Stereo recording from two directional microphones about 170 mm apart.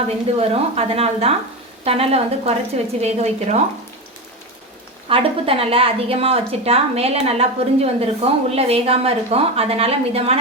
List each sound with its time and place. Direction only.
0.3 s a woman's voice: 35° right (ahead or behind)
5.0 s a woman's voice: 35° right (ahead or behind)